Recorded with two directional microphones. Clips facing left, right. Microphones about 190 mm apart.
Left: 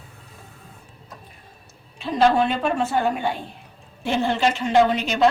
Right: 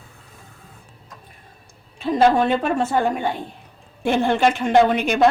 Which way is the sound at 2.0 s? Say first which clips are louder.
Right 2 dB; 45° right (ahead or behind).